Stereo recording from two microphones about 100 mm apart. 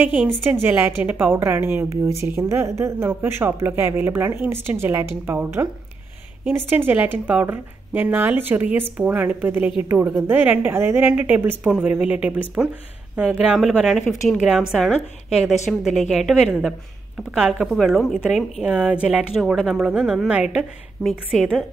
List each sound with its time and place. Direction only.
0.0 s a woman's voice: 15° right (ahead or behind)
6.9 s a woman's voice: 15° right (ahead or behind); by 21.6 s 5° left (ahead or behind)